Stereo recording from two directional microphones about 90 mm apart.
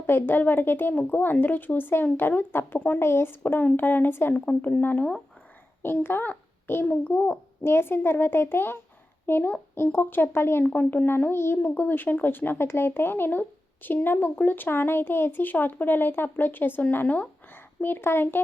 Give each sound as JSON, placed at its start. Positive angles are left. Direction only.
{"t": 0.1, "sound": "a child's voice", "side_deg": 25}